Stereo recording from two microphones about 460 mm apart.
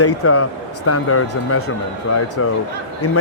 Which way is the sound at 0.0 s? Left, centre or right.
Left.